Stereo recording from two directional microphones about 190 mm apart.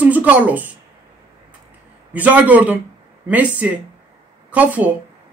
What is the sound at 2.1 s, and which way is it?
Speech, 10° right (ahead or behind).